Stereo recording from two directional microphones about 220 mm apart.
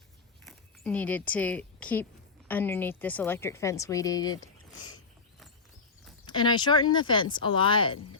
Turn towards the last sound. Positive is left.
turn(degrees=20)  # may be behind; listen again after turning